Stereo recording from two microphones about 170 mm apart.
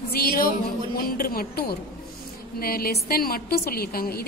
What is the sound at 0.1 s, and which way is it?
A woman's voice, 55° left (ahead or behind).